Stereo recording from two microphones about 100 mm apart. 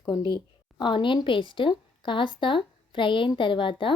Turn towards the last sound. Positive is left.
turn(degrees=55)  # may be behind; listen again after turning